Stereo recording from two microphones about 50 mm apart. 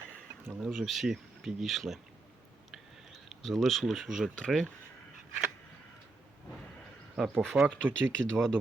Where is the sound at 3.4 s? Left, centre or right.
Centre.